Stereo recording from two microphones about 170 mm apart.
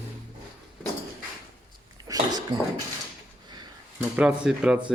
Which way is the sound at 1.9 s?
25° right (ahead or behind).